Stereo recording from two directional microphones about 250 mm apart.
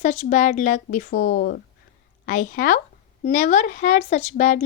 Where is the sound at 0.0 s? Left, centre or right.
Left.